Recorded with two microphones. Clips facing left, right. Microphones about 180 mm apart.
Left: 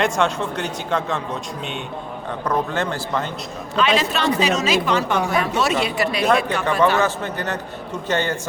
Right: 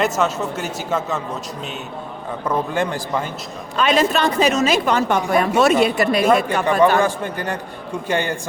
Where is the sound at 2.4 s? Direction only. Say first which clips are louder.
Right 1 dB; 10° right (ahead or behind).